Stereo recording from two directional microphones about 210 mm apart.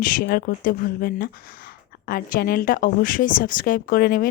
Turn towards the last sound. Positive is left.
turn(degrees=45)  # may be behind; listen again after turning